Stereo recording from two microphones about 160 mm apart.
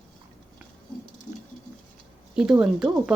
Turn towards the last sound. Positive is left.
turn(degrees=-5)  # may be behind; listen again after turning